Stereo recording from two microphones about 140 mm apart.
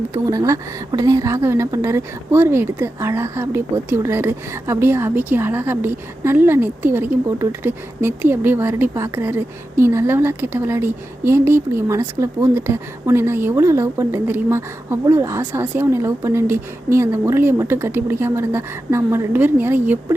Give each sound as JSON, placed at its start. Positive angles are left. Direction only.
{"t": 0.1, "sound": "speech", "side_deg": -25}